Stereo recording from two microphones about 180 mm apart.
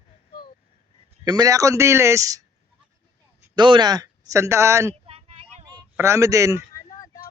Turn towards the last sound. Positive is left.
turn(degrees=20)  # may be behind; listen again after turning